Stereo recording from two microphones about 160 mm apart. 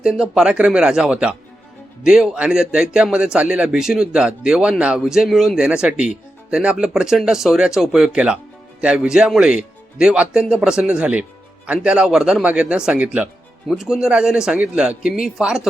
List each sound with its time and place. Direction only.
0.0 s a man's voice: 5° right (ahead or behind)